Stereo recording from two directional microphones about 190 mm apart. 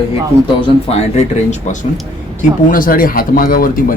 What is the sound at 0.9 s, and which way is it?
Speech, 35° left (ahead or behind).